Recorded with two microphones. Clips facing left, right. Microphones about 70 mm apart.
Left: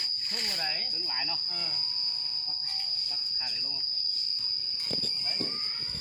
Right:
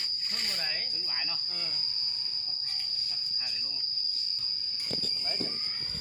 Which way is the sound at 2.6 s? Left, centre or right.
Centre.